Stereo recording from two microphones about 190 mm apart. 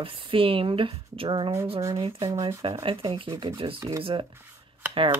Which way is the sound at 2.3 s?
15° right (ahead or behind).